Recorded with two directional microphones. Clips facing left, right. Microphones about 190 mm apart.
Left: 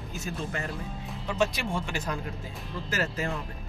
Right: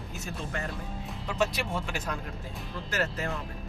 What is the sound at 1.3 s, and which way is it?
Speech, 5° right (ahead or behind).